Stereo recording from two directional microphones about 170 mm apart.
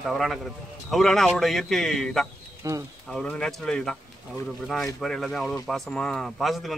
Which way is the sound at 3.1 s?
5° left (ahead or behind).